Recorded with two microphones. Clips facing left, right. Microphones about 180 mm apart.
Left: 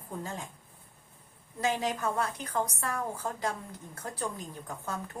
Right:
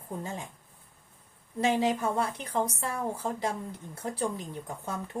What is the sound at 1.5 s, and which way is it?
A woman's voice, 25° right (ahead or behind).